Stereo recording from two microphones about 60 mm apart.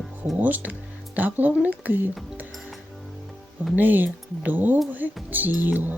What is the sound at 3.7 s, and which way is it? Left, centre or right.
Speech, right.